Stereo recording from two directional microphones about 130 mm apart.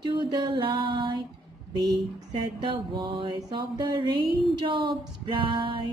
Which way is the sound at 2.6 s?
40° right (ahead or behind).